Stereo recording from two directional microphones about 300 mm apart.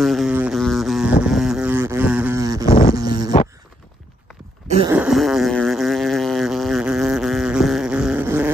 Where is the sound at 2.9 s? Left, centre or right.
Centre.